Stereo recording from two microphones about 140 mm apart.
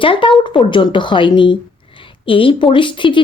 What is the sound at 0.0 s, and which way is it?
A woman's voice, 35° left (ahead or behind).